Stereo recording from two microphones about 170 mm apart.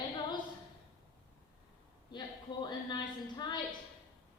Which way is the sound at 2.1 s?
25° left (ahead or behind).